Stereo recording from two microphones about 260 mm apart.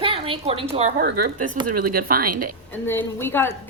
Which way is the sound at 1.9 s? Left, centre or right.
Right.